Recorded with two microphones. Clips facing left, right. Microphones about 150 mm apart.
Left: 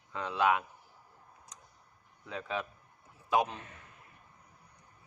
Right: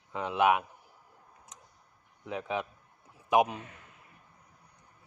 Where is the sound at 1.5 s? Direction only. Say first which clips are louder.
Right 2 dB; 20° right (ahead or behind).